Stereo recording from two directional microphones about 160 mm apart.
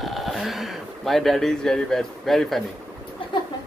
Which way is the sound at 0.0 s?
Centre (ahead or behind).